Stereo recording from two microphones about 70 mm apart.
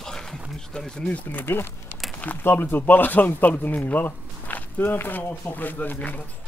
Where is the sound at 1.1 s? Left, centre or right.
Left.